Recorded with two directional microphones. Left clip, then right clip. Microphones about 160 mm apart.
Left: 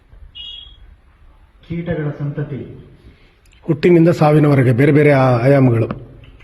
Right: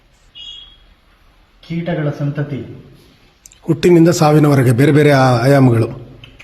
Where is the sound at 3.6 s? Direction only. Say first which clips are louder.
Right 2 dB; 15° right (ahead or behind).